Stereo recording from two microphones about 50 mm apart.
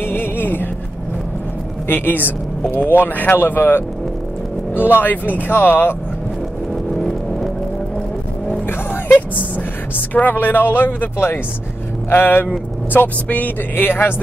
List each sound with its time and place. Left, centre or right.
0.0 s music: left
1.9 s speech: left
6.7 s vehicle: centre
10.1 s speech: left
12.1 s speech: left
13.3 s speech: left
13.8 s speech: left